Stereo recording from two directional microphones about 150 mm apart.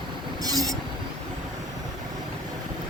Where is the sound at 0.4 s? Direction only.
25° right (ahead or behind).